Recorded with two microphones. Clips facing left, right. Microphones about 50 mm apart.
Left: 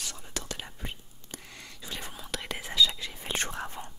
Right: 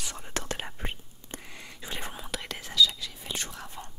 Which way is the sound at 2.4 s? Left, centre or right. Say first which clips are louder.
Left 2 dB; centre.